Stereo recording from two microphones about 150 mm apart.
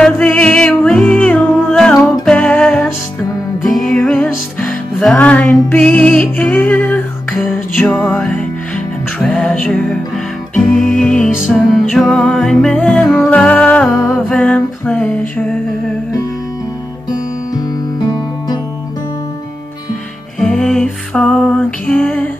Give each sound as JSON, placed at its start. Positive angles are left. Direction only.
{"t": 0.0, "sound": "music", "side_deg": 5}
{"t": 8.0, "sound": "music", "side_deg": 0}
{"t": 17.6, "sound": "music", "side_deg": 25}
{"t": 20.3, "sound": "music", "side_deg": 5}